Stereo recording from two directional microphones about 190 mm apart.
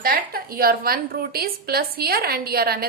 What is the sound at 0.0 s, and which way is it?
A woman's voice, 50° right (ahead or behind).